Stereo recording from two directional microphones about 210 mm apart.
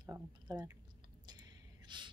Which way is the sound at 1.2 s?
20° right (ahead or behind).